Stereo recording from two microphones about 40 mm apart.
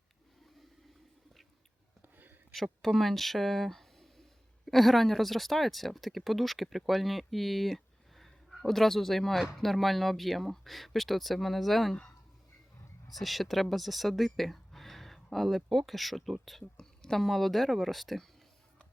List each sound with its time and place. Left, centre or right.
2.0 s a sound: right
2.5 s speech: centre
13.1 s speech: centre
16.7 s speech: centre